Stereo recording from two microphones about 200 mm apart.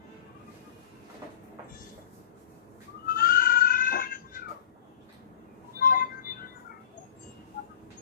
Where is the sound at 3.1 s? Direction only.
45° left (ahead or behind).